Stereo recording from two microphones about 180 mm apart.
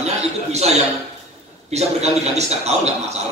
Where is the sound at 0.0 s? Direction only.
35° right (ahead or behind).